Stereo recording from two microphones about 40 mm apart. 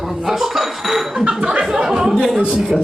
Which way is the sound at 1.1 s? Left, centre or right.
Right.